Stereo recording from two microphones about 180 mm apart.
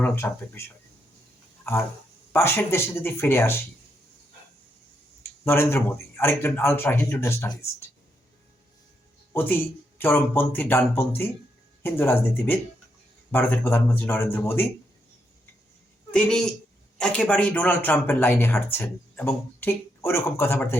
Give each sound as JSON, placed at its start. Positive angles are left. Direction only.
{"t": 0.0, "sound": "speech", "side_deg": 10}
{"t": 2.3, "sound": "speech", "side_deg": 15}
{"t": 5.2, "sound": "speech", "side_deg": 15}
{"t": 9.3, "sound": "speech", "side_deg": 10}
{"t": 16.1, "sound": "speech", "side_deg": 5}